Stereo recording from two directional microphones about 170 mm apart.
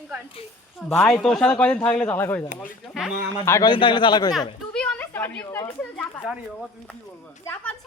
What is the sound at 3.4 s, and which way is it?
Speech, 15° left (ahead or behind).